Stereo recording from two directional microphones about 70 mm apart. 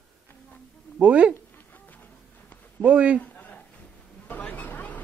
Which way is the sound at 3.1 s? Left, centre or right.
Centre.